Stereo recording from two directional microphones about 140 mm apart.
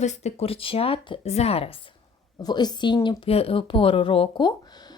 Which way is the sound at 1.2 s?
50° left (ahead or behind).